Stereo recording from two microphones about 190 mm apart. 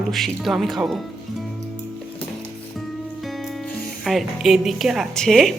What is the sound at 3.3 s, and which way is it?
Speech, centre (ahead or behind).